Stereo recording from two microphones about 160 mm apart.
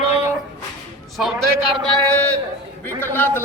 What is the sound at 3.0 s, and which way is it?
Speech, 10° left (ahead or behind).